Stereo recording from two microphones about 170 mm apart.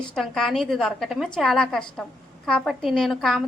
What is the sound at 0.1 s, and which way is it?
A woman's voice, centre (ahead or behind).